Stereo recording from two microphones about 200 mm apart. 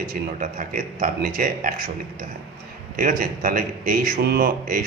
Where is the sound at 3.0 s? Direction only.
40° right (ahead or behind).